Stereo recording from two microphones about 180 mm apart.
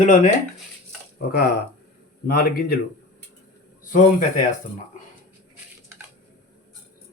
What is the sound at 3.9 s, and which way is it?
Speech, 45° left (ahead or behind).